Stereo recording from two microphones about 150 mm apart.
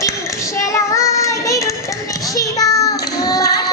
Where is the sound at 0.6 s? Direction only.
20° left (ahead or behind).